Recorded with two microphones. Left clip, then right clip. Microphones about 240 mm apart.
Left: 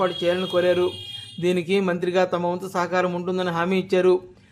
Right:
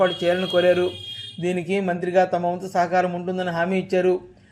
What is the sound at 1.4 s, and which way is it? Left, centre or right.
A man's voice, centre.